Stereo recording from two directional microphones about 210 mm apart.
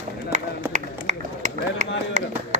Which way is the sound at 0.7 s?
35° right (ahead or behind).